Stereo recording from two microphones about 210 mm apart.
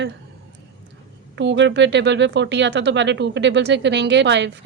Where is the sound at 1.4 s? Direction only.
60° right (ahead or behind).